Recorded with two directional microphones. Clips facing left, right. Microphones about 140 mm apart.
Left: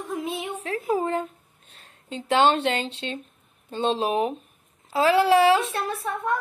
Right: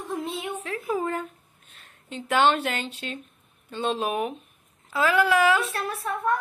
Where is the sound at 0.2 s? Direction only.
10° left (ahead or behind).